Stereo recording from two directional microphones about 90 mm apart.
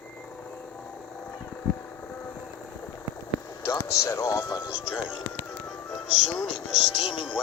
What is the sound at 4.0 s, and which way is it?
Speech, 35° left (ahead or behind).